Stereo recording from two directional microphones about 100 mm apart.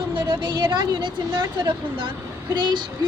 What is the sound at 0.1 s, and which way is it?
A woman's voice, 55° right (ahead or behind).